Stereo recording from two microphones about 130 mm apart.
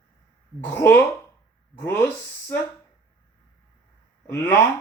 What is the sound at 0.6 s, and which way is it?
Speech, 15° left (ahead or behind).